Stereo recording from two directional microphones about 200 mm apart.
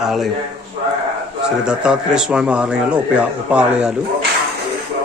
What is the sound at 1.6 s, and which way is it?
Speech, 5° right (ahead or behind).